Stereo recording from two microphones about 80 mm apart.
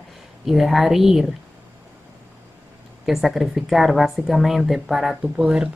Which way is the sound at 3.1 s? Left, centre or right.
Centre.